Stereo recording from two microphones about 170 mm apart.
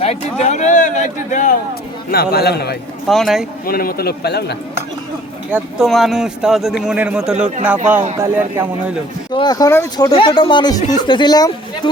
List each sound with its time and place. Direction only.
0.0 s a sound: 40° left (ahead or behind)
2.0 s a man's voice: 65° left (ahead or behind)
3.1 s speech: centre (ahead or behind)
3.7 s a man's voice: 60° left (ahead or behind)
5.5 s speech: 5° right (ahead or behind)
9.3 s speech: 25° left (ahead or behind)
10.1 s speech: 30° left (ahead or behind)